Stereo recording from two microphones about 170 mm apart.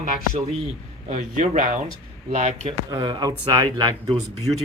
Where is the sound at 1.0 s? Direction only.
45° right (ahead or behind).